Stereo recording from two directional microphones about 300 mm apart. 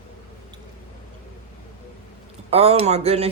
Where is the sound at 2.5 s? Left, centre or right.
Right.